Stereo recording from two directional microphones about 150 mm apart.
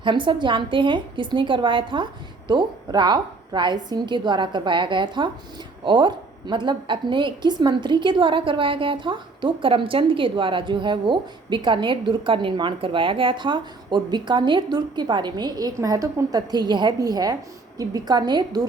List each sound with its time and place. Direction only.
0.0 s a woman's voice: 35° right (ahead or behind)